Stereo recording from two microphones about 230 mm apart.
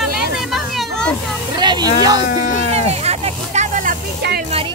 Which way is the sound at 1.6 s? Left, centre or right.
Centre.